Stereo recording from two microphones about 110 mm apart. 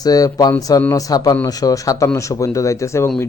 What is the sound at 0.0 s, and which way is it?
A man's voice, 35° left (ahead or behind).